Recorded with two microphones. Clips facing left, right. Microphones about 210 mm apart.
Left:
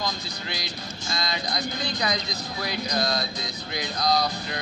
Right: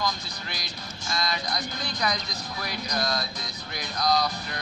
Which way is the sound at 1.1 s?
30° left (ahead or behind).